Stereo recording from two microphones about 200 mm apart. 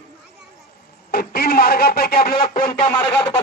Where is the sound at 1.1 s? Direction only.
50° left (ahead or behind).